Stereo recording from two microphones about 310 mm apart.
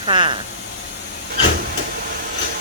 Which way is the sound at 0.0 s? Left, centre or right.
Centre.